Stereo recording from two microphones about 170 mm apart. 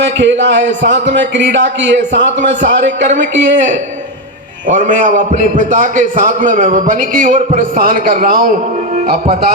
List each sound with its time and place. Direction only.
0.0 s a man's voice: 90° right
4.7 s a man's voice: 50° right (ahead or behind)